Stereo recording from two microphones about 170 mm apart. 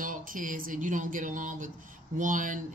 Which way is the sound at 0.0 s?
50° right (ahead or behind).